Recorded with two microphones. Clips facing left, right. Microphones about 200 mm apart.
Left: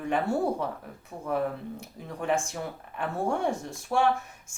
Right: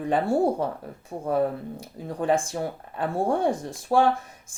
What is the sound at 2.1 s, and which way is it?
Speech, 35° right (ahead or behind).